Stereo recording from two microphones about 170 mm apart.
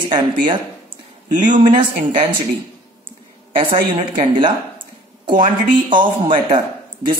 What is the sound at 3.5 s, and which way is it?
A woman's voice, 30° right (ahead or behind).